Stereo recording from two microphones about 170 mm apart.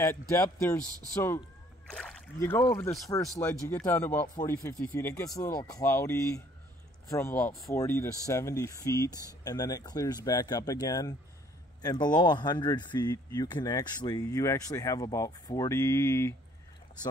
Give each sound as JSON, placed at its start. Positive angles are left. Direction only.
{"t": 0.0, "sound": "speech", "side_deg": 15}